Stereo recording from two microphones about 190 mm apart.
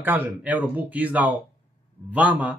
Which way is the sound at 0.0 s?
10° right (ahead or behind).